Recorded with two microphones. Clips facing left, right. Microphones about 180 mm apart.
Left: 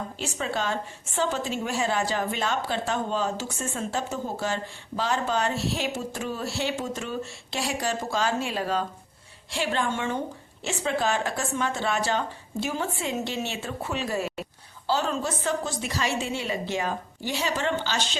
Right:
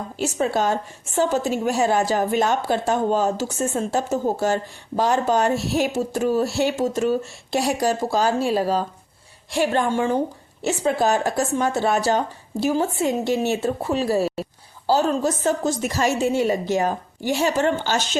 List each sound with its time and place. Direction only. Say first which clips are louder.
0.2 s a woman's voice: right 9 dB; 40° right (ahead or behind)